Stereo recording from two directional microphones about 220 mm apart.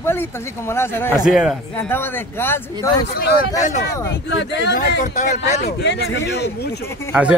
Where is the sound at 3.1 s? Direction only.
45° left (ahead or behind).